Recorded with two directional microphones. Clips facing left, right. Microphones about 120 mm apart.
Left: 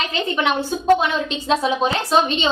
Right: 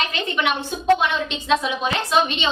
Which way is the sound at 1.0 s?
35° left (ahead or behind).